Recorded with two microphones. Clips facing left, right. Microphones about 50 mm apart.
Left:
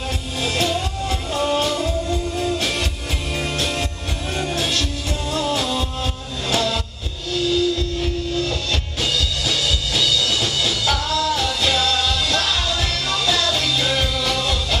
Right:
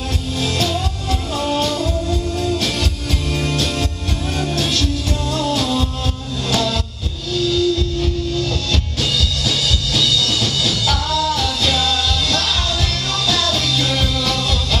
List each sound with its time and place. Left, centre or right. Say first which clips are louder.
0.4 s music: right 1 dB; centre